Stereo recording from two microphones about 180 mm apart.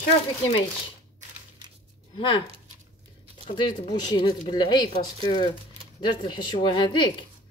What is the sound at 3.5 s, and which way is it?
Speech, 25° left (ahead or behind).